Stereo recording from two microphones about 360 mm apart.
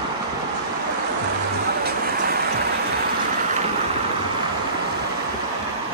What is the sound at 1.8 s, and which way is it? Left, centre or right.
Music, right.